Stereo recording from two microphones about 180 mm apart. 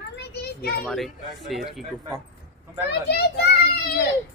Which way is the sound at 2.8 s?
65° left (ahead or behind).